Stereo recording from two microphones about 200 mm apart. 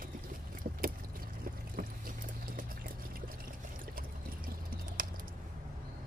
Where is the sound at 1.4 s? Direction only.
45° right (ahead or behind).